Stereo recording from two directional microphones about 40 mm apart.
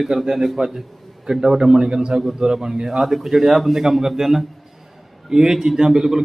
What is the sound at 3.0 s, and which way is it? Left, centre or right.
Speech, centre.